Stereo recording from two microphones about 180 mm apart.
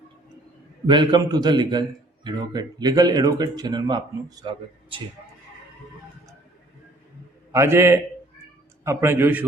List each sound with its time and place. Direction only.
0.9 s speech: 25° right (ahead or behind)
7.5 s a man's voice: 15° right (ahead or behind)